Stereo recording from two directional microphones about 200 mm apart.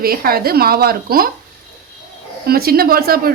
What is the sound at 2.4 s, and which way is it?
Speech, 50° right (ahead or behind).